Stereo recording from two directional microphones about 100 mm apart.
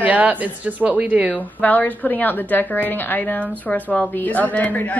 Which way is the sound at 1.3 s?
15° left (ahead or behind).